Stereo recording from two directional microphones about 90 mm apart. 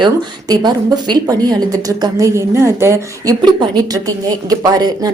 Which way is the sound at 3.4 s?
50° right (ahead or behind).